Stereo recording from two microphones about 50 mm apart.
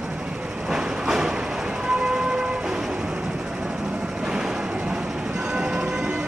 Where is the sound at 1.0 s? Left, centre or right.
Centre.